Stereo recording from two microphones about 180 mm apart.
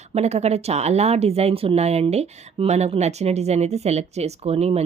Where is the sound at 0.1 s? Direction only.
35° right (ahead or behind).